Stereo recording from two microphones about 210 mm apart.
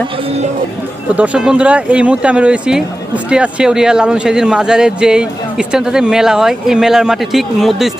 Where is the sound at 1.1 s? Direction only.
5° right (ahead or behind).